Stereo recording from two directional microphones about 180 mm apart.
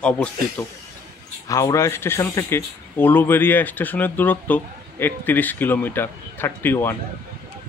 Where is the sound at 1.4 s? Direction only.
15° left (ahead or behind).